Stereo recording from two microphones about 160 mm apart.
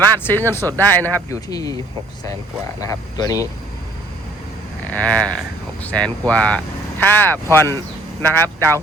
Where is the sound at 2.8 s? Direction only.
20° left (ahead or behind).